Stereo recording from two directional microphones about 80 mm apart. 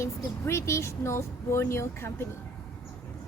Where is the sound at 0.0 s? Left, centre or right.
Left.